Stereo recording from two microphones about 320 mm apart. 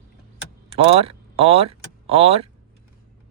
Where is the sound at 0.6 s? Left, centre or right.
Centre.